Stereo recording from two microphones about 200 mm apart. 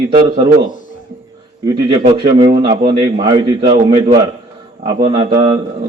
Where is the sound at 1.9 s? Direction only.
20° right (ahead or behind).